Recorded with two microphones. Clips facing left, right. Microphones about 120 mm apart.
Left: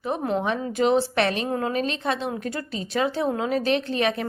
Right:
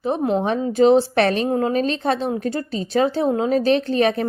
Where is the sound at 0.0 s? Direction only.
30° right (ahead or behind).